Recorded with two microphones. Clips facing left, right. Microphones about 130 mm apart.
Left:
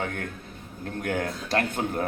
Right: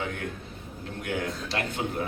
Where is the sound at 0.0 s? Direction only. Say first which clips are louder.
Left 1 dB; 50° left (ahead or behind).